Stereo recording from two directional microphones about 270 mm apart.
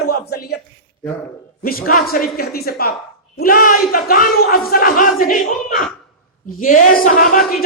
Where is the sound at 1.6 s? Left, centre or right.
Left.